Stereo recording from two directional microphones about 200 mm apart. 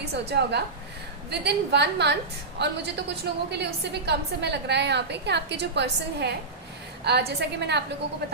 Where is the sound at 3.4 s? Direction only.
55° right (ahead or behind).